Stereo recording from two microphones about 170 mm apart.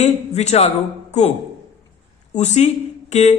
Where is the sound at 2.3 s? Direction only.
40° left (ahead or behind).